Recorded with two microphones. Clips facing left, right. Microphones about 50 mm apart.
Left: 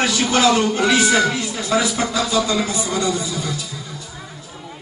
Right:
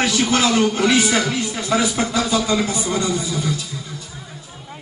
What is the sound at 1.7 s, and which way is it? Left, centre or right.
A man's voice, centre.